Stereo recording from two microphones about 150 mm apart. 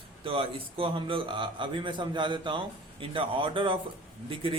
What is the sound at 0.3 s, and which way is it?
Speech, 35° right (ahead or behind).